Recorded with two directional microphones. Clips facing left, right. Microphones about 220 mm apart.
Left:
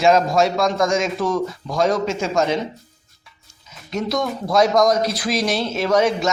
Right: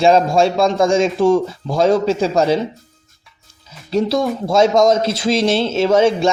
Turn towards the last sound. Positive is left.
turn(degrees=-30)  # may be behind; listen again after turning